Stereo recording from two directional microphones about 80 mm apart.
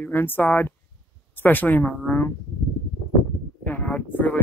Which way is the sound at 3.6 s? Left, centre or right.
Centre.